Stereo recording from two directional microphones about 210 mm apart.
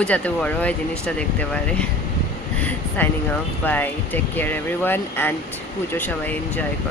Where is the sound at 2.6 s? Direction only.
5° left (ahead or behind).